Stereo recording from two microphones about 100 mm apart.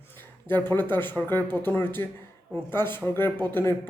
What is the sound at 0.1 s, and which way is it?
Speech, 20° left (ahead or behind).